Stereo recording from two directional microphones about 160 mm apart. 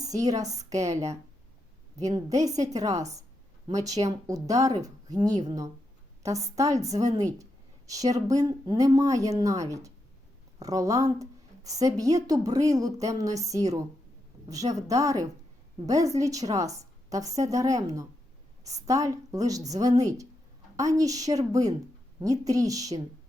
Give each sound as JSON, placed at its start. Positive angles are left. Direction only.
{"t": 0.1, "sound": "speech", "side_deg": -20}